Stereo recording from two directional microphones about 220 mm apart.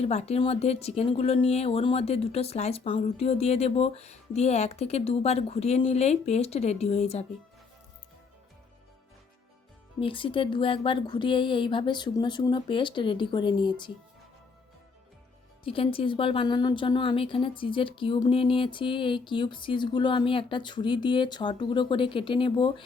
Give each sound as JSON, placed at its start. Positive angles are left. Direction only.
{"t": 0.0, "sound": "speech", "side_deg": 30}
{"t": 10.0, "sound": "speech", "side_deg": 25}
{"t": 15.6, "sound": "speech", "side_deg": 25}